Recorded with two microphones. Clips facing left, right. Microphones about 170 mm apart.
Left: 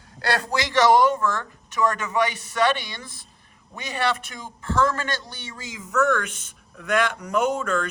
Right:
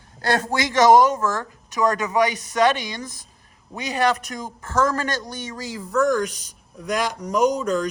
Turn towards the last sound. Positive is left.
turn(degrees=-40)  # may be behind; listen again after turning